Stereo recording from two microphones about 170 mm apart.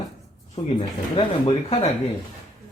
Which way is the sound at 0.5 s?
35° left (ahead or behind).